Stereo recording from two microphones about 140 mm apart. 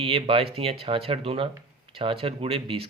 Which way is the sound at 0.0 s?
40° right (ahead or behind).